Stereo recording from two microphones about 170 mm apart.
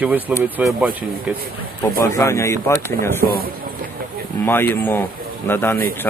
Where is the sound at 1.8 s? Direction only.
15° left (ahead or behind).